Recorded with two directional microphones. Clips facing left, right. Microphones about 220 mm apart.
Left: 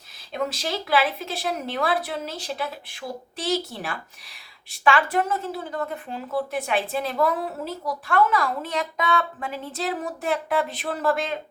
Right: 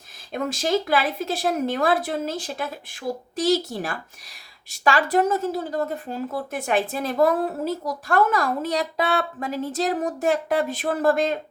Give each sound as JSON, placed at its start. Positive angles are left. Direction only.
{"t": 0.3, "sound": "a woman's voice", "side_deg": -45}